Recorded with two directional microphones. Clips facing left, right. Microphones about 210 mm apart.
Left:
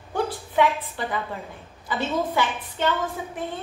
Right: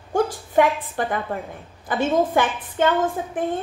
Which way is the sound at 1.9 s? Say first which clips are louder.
Right 6 dB; 50° right (ahead or behind).